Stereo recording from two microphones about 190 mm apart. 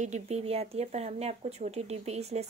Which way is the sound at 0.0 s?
35° right (ahead or behind).